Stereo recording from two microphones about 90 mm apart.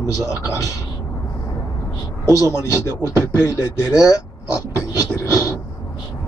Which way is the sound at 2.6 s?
30° left (ahead or behind).